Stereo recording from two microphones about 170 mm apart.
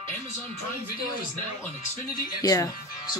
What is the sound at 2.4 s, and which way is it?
Speech, 20° left (ahead or behind).